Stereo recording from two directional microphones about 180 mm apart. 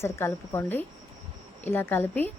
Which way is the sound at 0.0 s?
15° left (ahead or behind).